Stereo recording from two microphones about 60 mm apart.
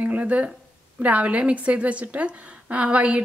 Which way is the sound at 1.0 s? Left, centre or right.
Right.